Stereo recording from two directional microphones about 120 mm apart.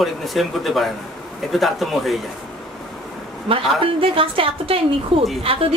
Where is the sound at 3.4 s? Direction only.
50° right (ahead or behind).